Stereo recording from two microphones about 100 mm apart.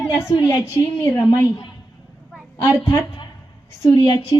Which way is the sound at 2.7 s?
30° left (ahead or behind).